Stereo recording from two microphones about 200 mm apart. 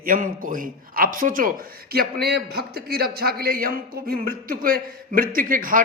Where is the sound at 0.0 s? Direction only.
45° right (ahead or behind).